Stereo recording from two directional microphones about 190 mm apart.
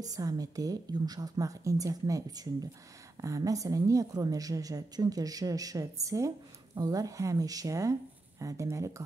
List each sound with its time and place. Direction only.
0.0 s a woman's voice: 20° right (ahead or behind)